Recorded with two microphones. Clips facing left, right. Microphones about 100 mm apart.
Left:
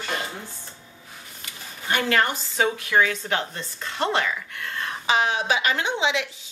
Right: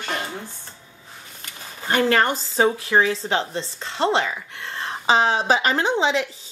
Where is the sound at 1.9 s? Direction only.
35° right (ahead or behind).